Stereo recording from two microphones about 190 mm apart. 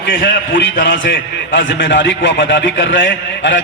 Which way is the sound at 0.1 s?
70° left (ahead or behind).